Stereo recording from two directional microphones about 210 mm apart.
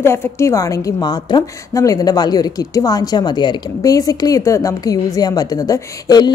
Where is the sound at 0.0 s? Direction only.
10° left (ahead or behind).